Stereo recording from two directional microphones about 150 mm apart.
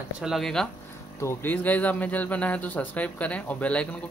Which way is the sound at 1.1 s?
15° left (ahead or behind).